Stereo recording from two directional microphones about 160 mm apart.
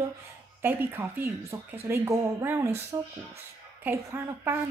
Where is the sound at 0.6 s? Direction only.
15° right (ahead or behind).